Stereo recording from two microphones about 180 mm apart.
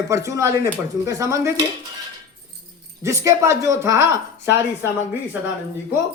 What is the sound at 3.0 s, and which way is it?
Speech, 15° right (ahead or behind).